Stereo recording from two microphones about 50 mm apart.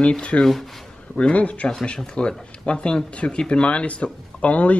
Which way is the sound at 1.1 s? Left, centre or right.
Left.